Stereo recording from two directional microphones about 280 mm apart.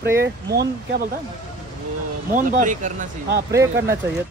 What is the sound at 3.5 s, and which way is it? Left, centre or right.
Speech, centre.